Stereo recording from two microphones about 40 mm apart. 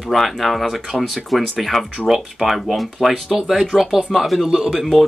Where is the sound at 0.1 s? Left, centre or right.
Centre.